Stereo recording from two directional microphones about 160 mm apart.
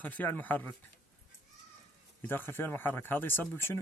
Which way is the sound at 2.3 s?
15° left (ahead or behind).